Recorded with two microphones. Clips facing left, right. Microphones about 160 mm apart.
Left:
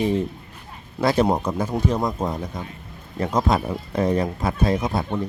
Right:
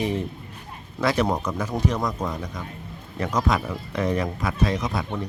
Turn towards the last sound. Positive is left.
turn(degrees=25)  # may be behind; listen again after turning